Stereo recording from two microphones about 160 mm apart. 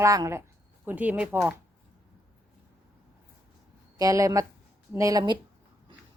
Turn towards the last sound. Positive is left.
turn(degrees=-25)  # may be behind; listen again after turning